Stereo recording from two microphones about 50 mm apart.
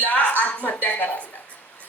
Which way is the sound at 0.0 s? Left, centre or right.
Left.